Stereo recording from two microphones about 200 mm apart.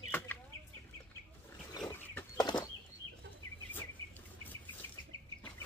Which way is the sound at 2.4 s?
20° left (ahead or behind).